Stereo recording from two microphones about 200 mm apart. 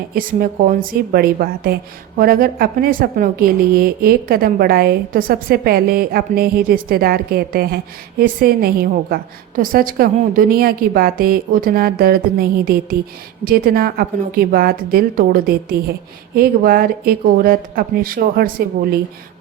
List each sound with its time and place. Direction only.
0.1 s a woman's voice: 45° right (ahead or behind)